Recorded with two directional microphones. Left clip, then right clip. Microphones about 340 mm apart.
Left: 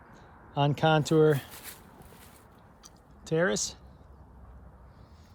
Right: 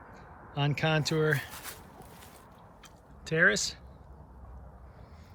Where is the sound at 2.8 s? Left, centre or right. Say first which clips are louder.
Left 1 dB; centre.